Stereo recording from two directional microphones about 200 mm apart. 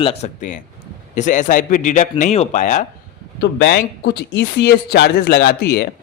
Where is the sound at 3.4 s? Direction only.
55° left (ahead or behind).